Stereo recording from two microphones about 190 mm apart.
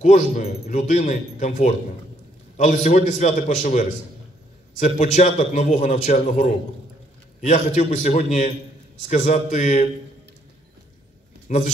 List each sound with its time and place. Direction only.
0.0 s speech: 35° left (ahead or behind)
11.4 s speech: 40° left (ahead or behind)